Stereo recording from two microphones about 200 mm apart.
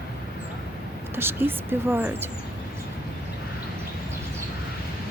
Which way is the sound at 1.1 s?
10° right (ahead or behind).